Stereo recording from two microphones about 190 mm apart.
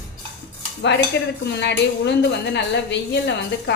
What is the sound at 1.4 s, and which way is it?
A woman's voice, 65° left (ahead or behind).